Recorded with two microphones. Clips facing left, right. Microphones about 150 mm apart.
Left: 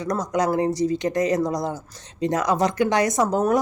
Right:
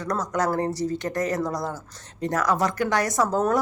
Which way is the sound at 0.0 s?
15° left (ahead or behind).